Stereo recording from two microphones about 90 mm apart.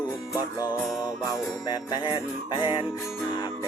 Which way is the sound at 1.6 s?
50° left (ahead or behind).